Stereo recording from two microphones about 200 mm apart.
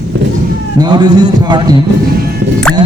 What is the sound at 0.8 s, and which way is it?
Speech, 20° right (ahead or behind).